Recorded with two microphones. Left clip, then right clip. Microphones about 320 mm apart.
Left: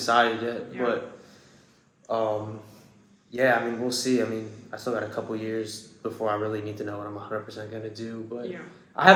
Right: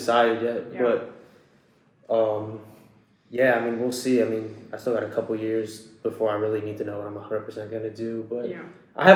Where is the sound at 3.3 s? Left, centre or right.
Centre.